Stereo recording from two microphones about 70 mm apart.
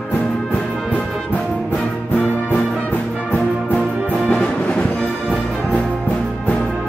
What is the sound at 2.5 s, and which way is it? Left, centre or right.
Music, left.